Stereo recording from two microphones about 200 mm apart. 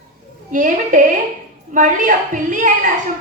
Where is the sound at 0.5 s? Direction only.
40° right (ahead or behind).